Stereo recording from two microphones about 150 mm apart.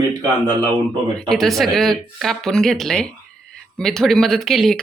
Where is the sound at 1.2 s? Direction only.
Centre (ahead or behind).